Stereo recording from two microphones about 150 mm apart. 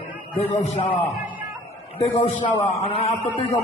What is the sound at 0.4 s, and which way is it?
A man's voice, 50° left (ahead or behind).